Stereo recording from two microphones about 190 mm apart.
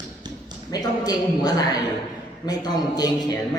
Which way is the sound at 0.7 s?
20° left (ahead or behind).